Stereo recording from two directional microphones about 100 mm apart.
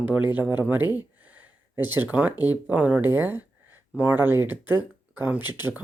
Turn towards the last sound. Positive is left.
turn(degrees=-20)  # may be behind; listen again after turning